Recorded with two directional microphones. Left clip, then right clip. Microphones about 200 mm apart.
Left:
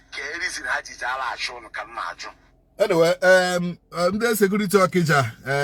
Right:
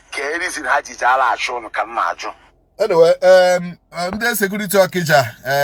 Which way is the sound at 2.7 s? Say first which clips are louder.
Right 6 dB; 20° left (ahead or behind).